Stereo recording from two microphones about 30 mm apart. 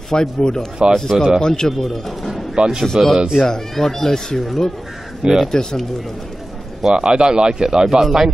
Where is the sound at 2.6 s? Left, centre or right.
Right.